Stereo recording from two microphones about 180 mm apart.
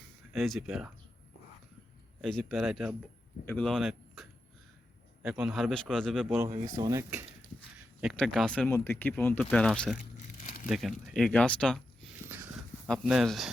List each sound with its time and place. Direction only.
0.3 s speech: centre (ahead or behind)
2.2 s speech: centre (ahead or behind)
6.7 s speech: 20° right (ahead or behind)
8.0 s speech: 5° left (ahead or behind)
10.0 s crumpling: 45° left (ahead or behind)
10.7 s speech: centre (ahead or behind)